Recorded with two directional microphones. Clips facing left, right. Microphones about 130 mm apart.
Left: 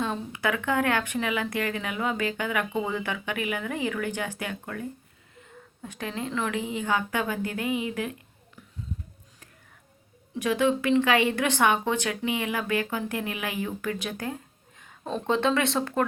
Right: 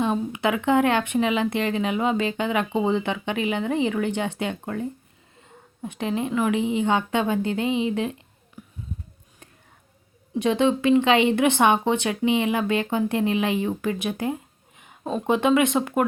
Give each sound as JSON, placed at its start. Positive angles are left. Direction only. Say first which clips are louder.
{"t": 0.0, "sound": "speech", "louder": "right 5 dB", "side_deg": -20}
{"t": 10.3, "sound": "speech", "louder": "right 3 dB", "side_deg": -25}